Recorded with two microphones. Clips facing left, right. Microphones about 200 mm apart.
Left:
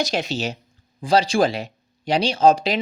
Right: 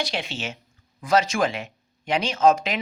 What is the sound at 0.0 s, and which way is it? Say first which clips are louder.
Speech: left 6 dB; 40° left (ahead or behind).